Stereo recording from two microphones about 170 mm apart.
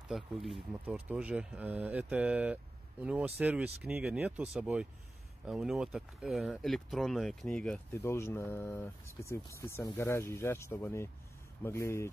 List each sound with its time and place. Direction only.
0.1 s speech: centre (ahead or behind)
7.9 s speech: 15° left (ahead or behind)